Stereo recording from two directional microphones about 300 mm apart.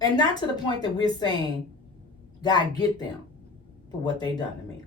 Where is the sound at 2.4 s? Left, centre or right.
Centre.